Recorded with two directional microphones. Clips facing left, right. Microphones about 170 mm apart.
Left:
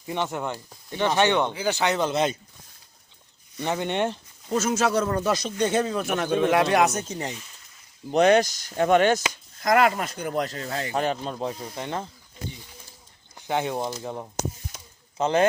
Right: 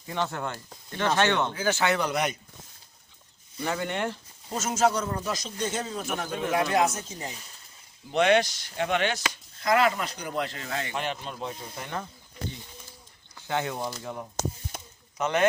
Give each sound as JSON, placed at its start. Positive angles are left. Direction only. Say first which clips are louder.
{"t": 0.1, "sound": "speech", "louder": "left 3 dB", "side_deg": 15}
{"t": 3.6, "sound": "speech", "louder": "left 4 dB", "side_deg": 20}
{"t": 4.5, "sound": "speech", "louder": "left 3 dB", "side_deg": 65}
{"t": 8.1, "sound": "speech", "louder": "left 4 dB", "side_deg": 40}
{"t": 13.3, "sound": "speech", "louder": "left 4 dB", "side_deg": 20}